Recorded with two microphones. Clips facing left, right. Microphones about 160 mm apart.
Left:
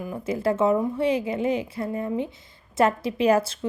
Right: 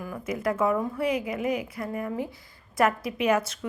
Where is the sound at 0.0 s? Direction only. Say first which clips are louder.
Left 4 dB; 25° left (ahead or behind).